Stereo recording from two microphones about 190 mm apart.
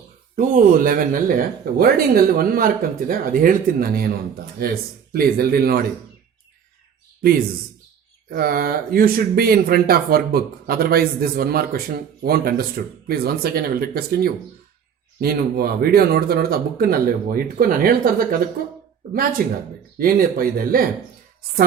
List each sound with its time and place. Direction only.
0.3 s speech: 45° right (ahead or behind)
8.3 s speech: 50° right (ahead or behind)